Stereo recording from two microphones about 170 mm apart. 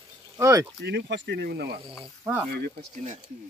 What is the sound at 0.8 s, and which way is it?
Speech, 90° right.